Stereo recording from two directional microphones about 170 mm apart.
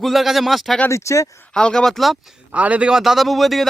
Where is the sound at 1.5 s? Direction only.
5° left (ahead or behind).